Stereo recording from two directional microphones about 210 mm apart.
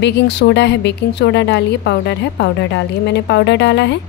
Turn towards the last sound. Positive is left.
turn(degrees=55)  # may be behind; listen again after turning